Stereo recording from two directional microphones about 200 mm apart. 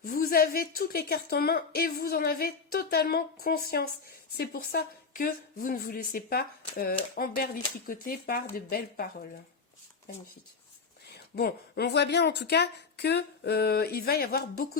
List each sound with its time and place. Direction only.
0.0 s a woman's voice: 45° left (ahead or behind)
11.1 s a woman's voice: 50° left (ahead or behind)